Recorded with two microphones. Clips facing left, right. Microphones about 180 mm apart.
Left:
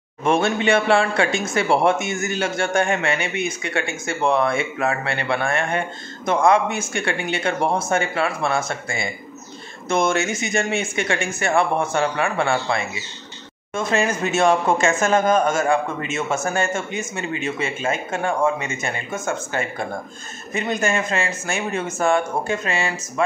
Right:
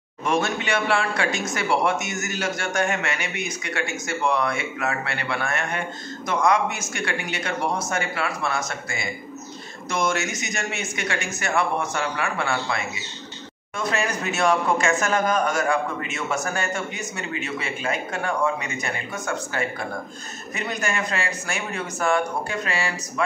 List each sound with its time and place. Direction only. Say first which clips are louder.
0.2 s a man's voice: left 5 dB; 25° left (ahead or behind)